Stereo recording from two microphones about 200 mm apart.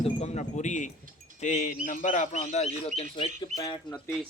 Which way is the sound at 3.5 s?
15° left (ahead or behind).